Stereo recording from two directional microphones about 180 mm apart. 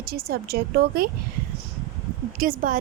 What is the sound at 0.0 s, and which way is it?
A woman's voice, 60° right (ahead or behind).